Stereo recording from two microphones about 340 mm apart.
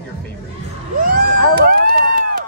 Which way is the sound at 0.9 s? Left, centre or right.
Right.